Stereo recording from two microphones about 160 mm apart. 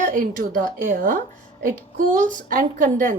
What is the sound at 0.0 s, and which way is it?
Speech, 60° right (ahead or behind).